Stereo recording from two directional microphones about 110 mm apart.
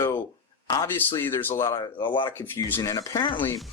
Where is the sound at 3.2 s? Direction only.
50° left (ahead or behind).